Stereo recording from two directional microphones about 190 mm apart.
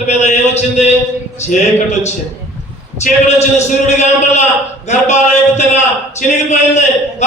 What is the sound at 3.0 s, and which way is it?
A man's voice, 35° left (ahead or behind).